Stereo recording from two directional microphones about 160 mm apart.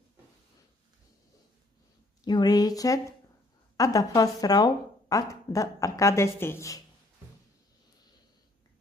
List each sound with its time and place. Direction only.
2.2 s a woman's voice: 25° left (ahead or behind)